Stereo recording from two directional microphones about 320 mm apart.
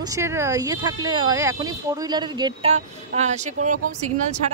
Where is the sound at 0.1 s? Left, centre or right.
Centre.